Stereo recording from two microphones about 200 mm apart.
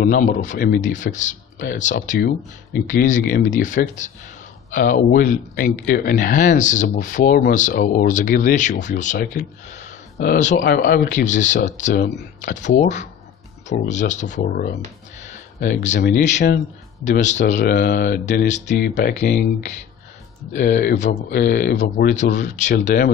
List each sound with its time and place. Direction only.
0.0 s speech: 40° left (ahead or behind)
15.2 s speech: 40° left (ahead or behind)
17.0 s speech: 35° left (ahead or behind)
18.9 s speech: 50° left (ahead or behind)